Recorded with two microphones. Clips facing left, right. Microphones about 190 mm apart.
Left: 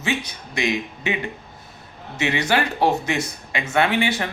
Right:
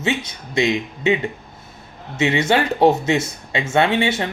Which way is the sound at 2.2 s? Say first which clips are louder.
Right 4 dB; 25° right (ahead or behind).